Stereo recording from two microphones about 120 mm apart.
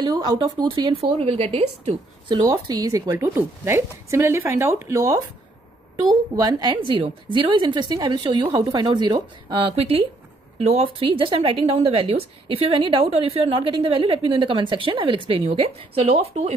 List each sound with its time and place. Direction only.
0.9 s speech: 50° right (ahead or behind)
2.4 s a woman's voice: 30° right (ahead or behind)
3.1 s a woman's voice: 20° right (ahead or behind); by 16.5 s 55° right (ahead or behind)